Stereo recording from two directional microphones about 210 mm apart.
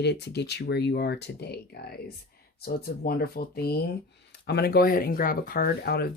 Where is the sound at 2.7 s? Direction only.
45° left (ahead or behind).